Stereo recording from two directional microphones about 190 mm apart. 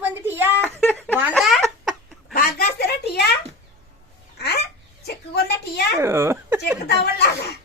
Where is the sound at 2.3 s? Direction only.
55° left (ahead or behind).